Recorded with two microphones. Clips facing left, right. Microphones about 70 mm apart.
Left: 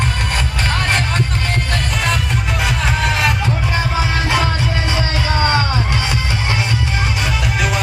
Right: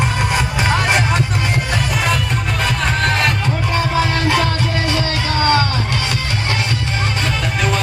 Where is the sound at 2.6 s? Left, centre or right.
Centre.